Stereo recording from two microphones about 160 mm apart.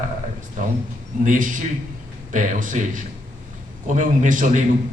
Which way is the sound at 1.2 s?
55° right (ahead or behind).